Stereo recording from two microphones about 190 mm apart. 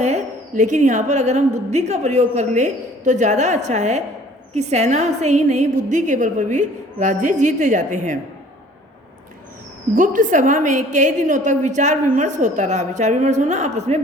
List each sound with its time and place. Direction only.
0.0 s a woman's voice: 40° right (ahead or behind)
9.9 s a woman's voice: 45° right (ahead or behind)